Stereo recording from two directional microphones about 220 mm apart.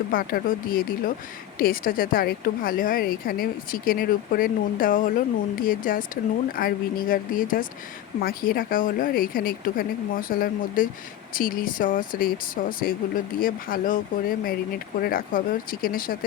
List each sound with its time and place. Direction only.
0.1 s a woman's voice: 40° left (ahead or behind)